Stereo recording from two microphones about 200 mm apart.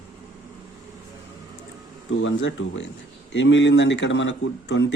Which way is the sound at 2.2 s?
70° left (ahead or behind).